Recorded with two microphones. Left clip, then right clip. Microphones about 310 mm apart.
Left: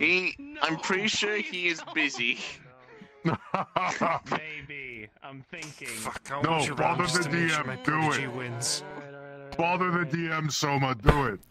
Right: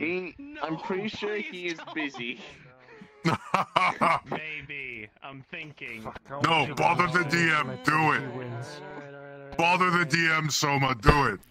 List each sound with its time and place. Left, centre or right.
0.0 s a man's voice: left
3.3 s speech: right
4.4 s a sound: centre
6.4 s speech: right
9.6 s speech: right
10.3 s speech: centre